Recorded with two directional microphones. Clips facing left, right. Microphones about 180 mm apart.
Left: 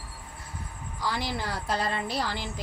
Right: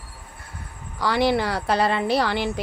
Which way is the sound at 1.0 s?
70° right (ahead or behind).